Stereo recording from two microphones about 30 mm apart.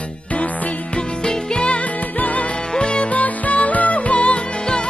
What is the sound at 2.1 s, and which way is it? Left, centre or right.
Music, left.